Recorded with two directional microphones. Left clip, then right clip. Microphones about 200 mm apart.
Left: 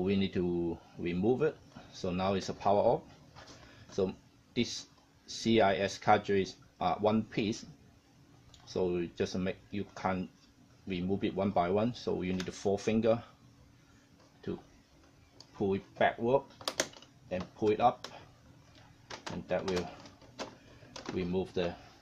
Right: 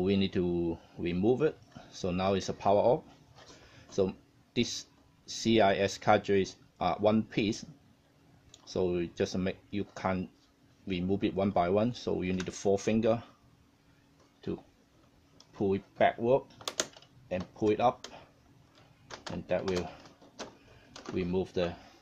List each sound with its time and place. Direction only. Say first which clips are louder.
0.0 s speech: right 3 dB; 45° right (ahead or behind)
15.5 s speech: right 2 dB; 40° right (ahead or behind)
19.4 s speech: right 2 dB; 40° right (ahead or behind)
21.2 s speech: right 2 dB; 45° right (ahead or behind)